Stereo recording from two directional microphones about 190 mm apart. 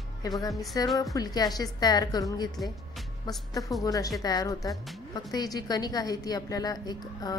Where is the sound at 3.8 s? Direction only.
20° left (ahead or behind).